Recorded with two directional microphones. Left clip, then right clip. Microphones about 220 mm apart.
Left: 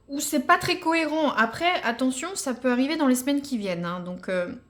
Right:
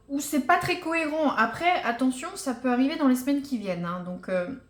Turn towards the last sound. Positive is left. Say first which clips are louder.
# left 1 dB
turn(degrees=40)  # may be behind; listen again after turning